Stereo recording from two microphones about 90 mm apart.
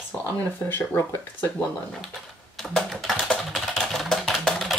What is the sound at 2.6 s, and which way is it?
Typing, 5° left (ahead or behind).